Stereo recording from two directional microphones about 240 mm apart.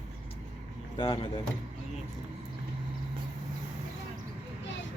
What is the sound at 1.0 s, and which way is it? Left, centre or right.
Speech, left.